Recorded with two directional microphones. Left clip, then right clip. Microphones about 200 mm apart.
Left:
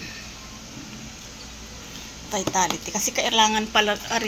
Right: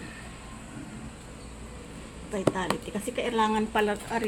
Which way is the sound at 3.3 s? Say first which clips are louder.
Left 6 dB; centre (ahead or behind).